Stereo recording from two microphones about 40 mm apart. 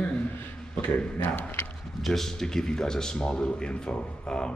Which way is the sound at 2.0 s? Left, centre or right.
Centre.